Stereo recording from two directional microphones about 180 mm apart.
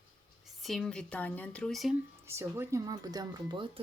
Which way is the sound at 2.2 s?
15° right (ahead or behind).